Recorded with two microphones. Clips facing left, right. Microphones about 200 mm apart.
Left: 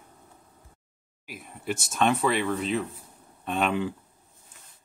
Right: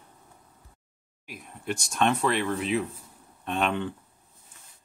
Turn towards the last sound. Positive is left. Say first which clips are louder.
# left 1 dB
turn(degrees=5)  # may be behind; listen again after turning